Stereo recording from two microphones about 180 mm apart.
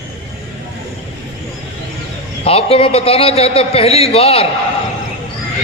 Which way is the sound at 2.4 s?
35° left (ahead or behind).